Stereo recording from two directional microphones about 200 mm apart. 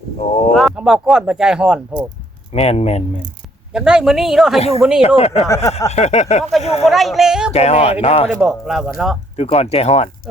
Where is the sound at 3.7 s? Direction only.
5° right (ahead or behind).